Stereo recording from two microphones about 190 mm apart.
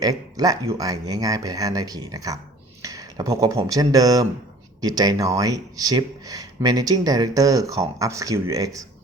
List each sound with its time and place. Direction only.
0.0 s speech: 20° right (ahead or behind)
2.8 s a sound: 20° right (ahead or behind)
3.6 s speech: 20° right (ahead or behind)